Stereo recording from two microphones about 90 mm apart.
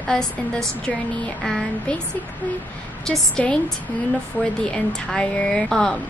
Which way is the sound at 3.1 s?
10° left (ahead or behind).